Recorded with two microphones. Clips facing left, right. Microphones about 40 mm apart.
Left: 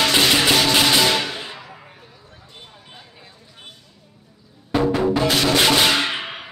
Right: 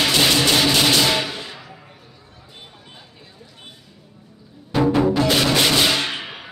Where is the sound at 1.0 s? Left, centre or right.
Centre.